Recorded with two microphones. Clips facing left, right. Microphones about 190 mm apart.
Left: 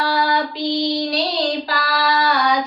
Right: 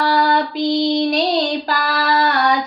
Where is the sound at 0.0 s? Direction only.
50° right (ahead or behind).